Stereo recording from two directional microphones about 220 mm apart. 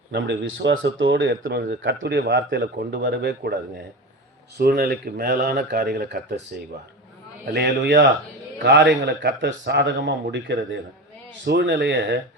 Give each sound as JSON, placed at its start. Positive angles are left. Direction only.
{"t": 0.1, "sound": "speech", "side_deg": -55}
{"t": 4.5, "sound": "speech", "side_deg": -45}
{"t": 7.5, "sound": "speech", "side_deg": -50}